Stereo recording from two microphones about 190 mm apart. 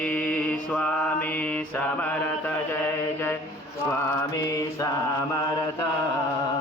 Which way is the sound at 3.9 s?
15° left (ahead or behind).